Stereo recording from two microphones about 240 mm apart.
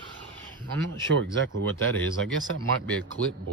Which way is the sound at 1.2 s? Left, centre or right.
Right.